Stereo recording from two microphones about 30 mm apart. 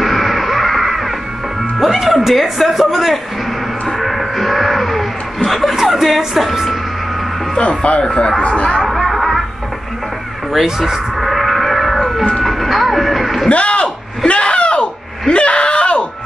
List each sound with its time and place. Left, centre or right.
0.0 s music: centre
2.3 s a man's voice: centre
3.9 s a sound: centre
5.8 s chuckle: centre
7.5 s speech: left
8.0 s speech: left
8.4 s speech: left
8.8 s music: centre
10.5 s a man's voice: centre
11.1 s music: centre
13.5 s a sound: left